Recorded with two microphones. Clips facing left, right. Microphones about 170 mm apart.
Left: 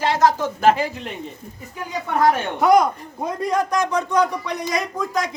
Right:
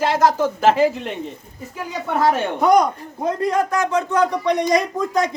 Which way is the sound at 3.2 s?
15° left (ahead or behind).